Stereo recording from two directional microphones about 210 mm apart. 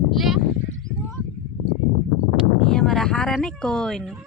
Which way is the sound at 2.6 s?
Centre (ahead or behind).